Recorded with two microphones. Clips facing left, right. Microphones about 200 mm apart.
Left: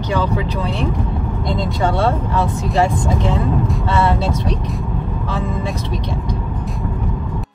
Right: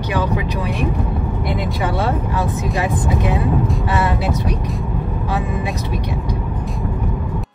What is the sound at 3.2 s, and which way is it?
Vehicle, 15° right (ahead or behind).